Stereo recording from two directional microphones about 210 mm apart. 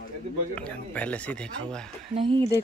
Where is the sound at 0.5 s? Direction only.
5° left (ahead or behind).